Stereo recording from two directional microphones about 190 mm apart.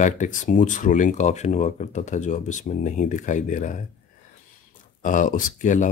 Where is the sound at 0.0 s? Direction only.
40° left (ahead or behind).